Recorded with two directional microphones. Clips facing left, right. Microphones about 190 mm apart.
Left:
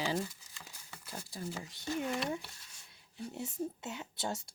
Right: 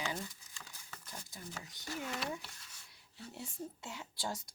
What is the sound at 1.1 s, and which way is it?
Speech, 30° left (ahead or behind).